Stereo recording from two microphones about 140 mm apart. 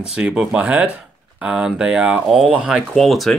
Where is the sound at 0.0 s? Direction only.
5° right (ahead or behind).